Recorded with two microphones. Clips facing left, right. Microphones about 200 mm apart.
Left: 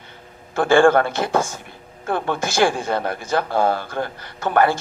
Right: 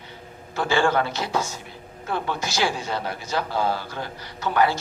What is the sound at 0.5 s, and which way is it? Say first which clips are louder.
A man's voice: left 8 dB; 50° left (ahead or behind).